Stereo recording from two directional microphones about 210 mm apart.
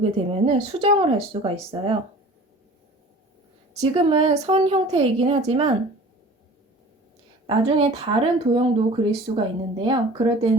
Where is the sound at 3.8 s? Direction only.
25° right (ahead or behind).